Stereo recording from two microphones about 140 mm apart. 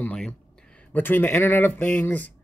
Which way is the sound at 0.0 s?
10° left (ahead or behind).